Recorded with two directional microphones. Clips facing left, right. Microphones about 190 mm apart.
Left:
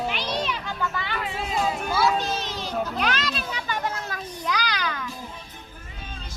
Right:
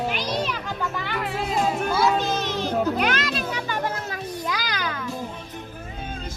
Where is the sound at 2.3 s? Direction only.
50° right (ahead or behind).